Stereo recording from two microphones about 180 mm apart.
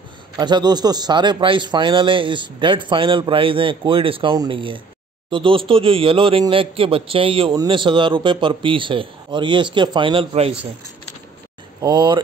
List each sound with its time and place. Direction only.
0.4 s a man's voice: 25° right (ahead or behind)
11.8 s a man's voice: 25° right (ahead or behind)